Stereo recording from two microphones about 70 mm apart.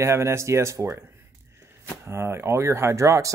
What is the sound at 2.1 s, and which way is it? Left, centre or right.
Speech, right.